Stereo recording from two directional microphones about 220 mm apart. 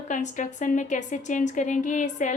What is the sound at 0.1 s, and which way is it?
A woman's voice, 35° left (ahead or behind).